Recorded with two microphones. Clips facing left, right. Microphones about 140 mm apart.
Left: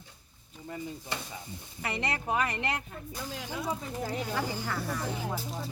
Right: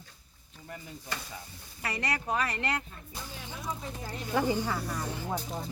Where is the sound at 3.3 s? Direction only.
90° left.